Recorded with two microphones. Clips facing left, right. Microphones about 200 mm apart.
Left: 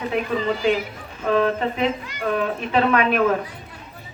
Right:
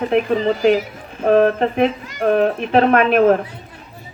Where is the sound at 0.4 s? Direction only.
40° right (ahead or behind).